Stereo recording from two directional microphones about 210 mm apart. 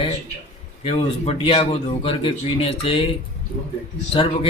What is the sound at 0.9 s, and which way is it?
A man's voice, 30° left (ahead or behind).